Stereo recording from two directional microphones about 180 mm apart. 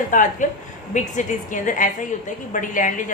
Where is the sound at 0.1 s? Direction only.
45° left (ahead or behind).